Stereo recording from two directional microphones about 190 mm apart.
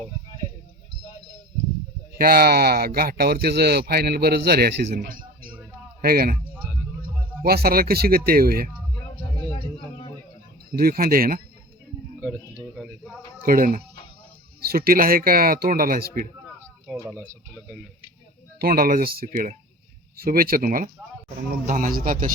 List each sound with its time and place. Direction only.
2.1 s speech: 55° right (ahead or behind)
7.4 s a man's voice: 55° right (ahead or behind)
10.7 s a man's voice: 50° right (ahead or behind)
12.2 s a sound: 10° right (ahead or behind)
13.4 s a man's voice: 50° right (ahead or behind)
16.6 s a sound: 5° right (ahead or behind)
18.6 s a man's voice: 50° right (ahead or behind)